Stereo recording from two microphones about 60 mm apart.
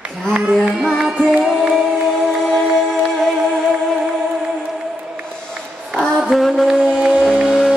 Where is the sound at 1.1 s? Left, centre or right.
Right.